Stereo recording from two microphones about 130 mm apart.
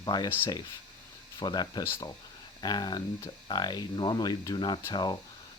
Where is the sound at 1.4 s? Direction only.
30° left (ahead or behind).